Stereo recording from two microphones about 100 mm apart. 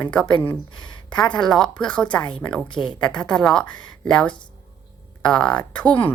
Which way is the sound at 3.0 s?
10° left (ahead or behind).